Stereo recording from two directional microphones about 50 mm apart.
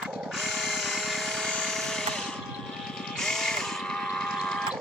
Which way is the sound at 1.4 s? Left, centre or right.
Centre.